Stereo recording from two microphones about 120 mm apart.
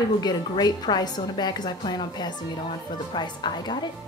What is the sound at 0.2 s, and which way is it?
A woman's voice, 35° left (ahead or behind).